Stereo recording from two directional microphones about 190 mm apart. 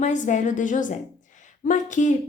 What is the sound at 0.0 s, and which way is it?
A woman's voice, 40° left (ahead or behind).